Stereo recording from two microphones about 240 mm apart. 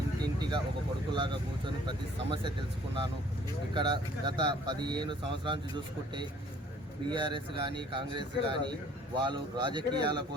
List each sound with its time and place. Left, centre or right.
0.2 s vehicle: centre
1.1 s speech: centre
3.8 s speech: centre
7.1 s speech: centre